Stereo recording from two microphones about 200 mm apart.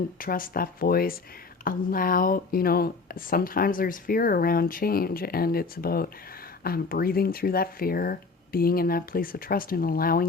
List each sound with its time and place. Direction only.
0.2 s speech: 45° left (ahead or behind)